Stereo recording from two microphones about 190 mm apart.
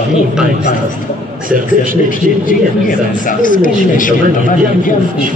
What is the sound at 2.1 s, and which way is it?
Speech, 45° left (ahead or behind).